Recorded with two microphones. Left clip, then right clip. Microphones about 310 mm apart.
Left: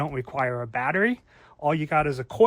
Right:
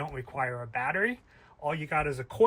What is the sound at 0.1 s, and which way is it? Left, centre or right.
Speech, centre.